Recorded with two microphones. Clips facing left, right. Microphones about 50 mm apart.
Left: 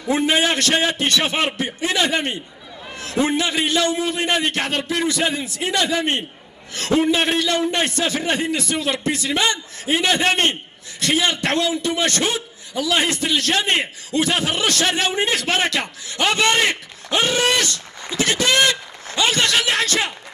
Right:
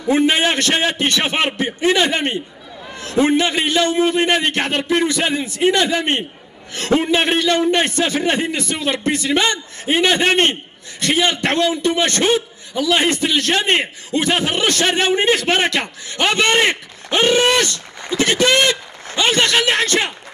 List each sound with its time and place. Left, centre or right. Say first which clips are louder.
0.1 s a man's voice: right 3 dB; right